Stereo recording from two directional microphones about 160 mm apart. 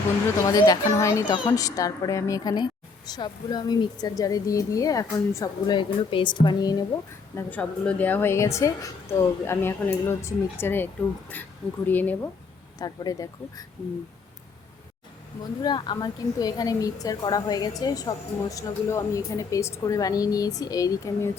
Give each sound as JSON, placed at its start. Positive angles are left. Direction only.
{"t": 0.4, "sound": "a woman's voice", "side_deg": 25}
{"t": 11.9, "sound": "a woman's voice", "side_deg": 10}
{"t": 12.8, "sound": "a woman's voice", "side_deg": 20}
{"t": 15.6, "sound": "a woman's voice", "side_deg": 25}